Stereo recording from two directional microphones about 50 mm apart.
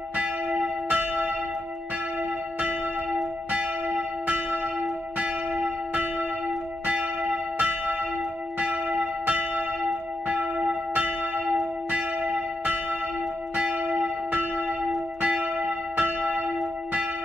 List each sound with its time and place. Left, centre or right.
0.2 s church bell: right
3.5 s church bell: right
7.5 s church bell: right
15.2 s church bell: right